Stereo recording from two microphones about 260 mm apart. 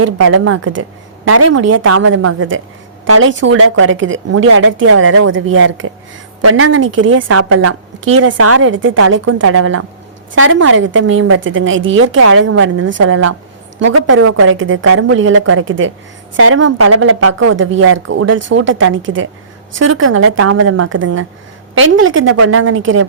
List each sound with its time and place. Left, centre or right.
0.0 s a woman's voice: right
2.0 s a woman's voice: right